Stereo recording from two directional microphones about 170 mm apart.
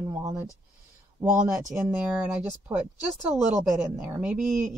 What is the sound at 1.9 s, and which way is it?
Speech, 10° right (ahead or behind).